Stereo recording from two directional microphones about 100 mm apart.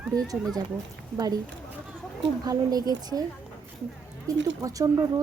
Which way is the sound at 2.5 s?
40° right (ahead or behind).